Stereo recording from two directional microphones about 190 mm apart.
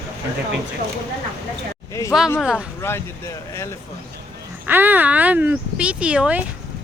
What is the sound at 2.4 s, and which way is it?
Speech, 5° right (ahead or behind).